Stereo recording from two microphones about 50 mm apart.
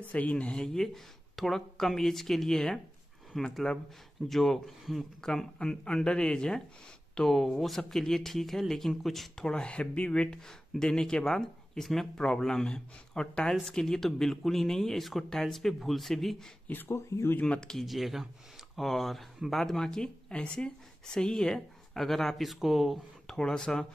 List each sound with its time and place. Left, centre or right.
0.1 s speech: left
0.7 s speech: centre
5.2 s speech: centre
9.4 s speech: centre
16.6 s speech: left
16.9 s speech: left
17.4 s speech: left
17.8 s speech: centre
23.3 s speech: centre